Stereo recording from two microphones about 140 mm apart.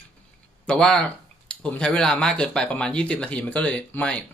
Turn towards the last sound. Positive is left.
turn(degrees=10)  # may be behind; listen again after turning